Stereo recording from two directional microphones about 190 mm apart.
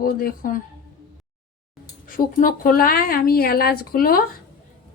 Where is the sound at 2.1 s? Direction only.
50° left (ahead or behind).